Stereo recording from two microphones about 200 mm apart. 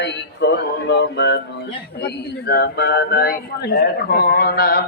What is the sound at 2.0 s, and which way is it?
Speech, 55° left (ahead or behind).